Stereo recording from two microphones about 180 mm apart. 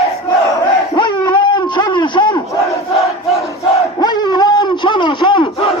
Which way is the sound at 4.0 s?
25° left (ahead or behind).